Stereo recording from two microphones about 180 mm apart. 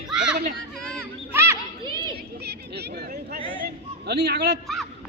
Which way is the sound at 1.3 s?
15° right (ahead or behind).